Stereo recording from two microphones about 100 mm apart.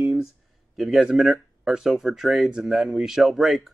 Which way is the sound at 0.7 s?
Centre (ahead or behind).